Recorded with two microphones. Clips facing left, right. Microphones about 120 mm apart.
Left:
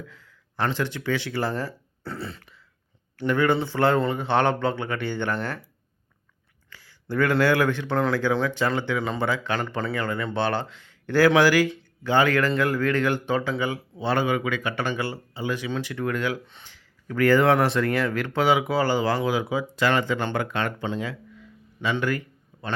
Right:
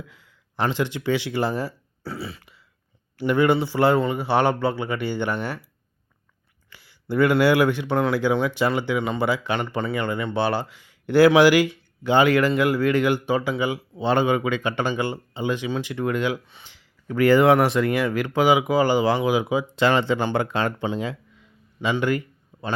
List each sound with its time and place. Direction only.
0.1 s speech: 15° right (ahead or behind)
6.7 s speech: 15° right (ahead or behind)
20.8 s a sound: 20° right (ahead or behind)